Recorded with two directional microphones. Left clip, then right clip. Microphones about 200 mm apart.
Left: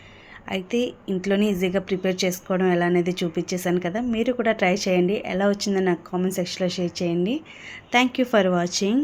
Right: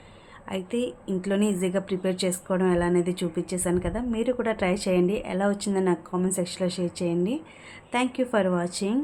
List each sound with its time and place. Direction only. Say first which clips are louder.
0.4 s a woman's voice: left 4 dB; 10° left (ahead or behind)